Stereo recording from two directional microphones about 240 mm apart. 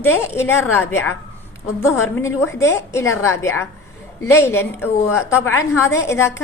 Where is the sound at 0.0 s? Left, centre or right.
Centre.